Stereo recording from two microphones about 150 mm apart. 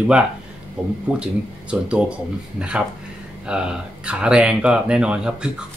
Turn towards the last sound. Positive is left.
turn(degrees=-5)  # may be behind; listen again after turning